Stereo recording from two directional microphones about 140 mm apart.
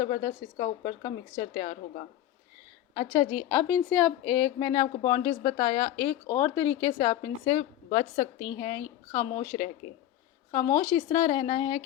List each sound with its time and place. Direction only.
0.0 s a woman's voice: 30° left (ahead or behind)
1.6 s a woman's voice: 65° left (ahead or behind)
3.2 s speech: 15° left (ahead or behind)
4.7 s a woman's voice: 30° left (ahead or behind)
6.2 s a woman's voice: 15° left (ahead or behind); by 11.8 s 30° left (ahead or behind)